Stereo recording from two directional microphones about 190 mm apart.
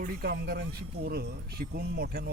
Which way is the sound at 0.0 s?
50° right (ahead or behind).